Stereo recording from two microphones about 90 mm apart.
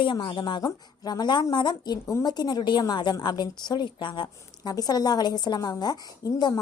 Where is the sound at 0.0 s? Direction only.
65° left (ahead or behind).